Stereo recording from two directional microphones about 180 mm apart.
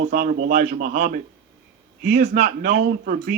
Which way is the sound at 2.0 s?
60° right (ahead or behind).